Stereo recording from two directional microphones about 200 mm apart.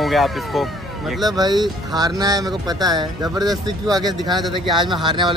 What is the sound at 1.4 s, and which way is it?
Speech, 20° right (ahead or behind).